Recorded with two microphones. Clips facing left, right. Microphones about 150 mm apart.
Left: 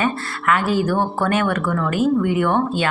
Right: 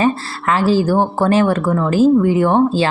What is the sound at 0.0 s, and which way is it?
Speech, 30° right (ahead or behind).